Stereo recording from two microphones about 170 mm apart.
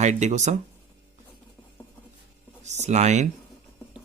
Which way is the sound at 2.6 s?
40° right (ahead or behind).